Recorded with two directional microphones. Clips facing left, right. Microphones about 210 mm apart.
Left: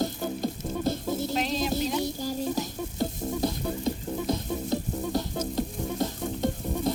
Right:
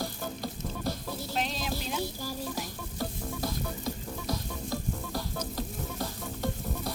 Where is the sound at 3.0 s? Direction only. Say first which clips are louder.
Left 6 dB; 25° left (ahead or behind).